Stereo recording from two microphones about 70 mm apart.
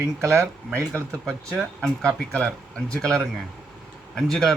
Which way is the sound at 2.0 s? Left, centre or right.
Centre.